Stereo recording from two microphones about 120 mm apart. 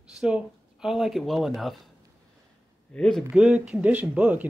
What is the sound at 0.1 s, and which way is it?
Speech, 5° right (ahead or behind).